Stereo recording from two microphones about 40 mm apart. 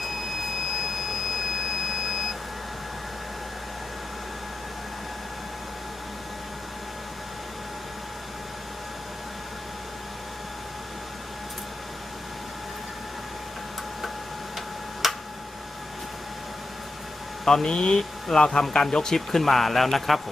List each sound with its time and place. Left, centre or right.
0.7 s beep: centre
15.0 s tick-tock: centre
17.4 s speech: centre